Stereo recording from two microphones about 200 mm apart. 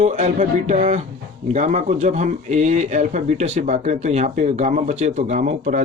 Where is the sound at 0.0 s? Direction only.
35° right (ahead or behind).